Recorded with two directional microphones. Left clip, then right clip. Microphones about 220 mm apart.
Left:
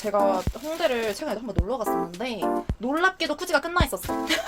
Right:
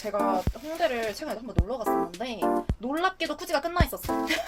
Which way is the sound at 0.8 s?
30° left (ahead or behind).